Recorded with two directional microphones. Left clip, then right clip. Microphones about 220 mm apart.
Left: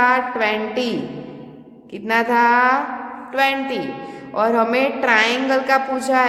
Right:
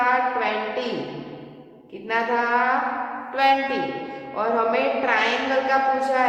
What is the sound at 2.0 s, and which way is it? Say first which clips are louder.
A woman's voice: left 7 dB; 50° left (ahead or behind).